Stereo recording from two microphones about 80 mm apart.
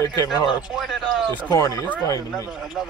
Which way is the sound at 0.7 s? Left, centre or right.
Centre.